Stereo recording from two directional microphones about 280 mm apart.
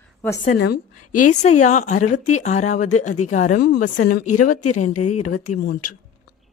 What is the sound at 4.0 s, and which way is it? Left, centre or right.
A woman's voice, left.